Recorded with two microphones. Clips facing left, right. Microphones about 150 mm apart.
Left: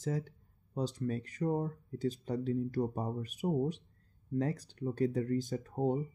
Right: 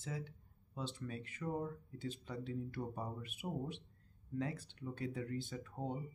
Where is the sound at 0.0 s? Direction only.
40° left (ahead or behind).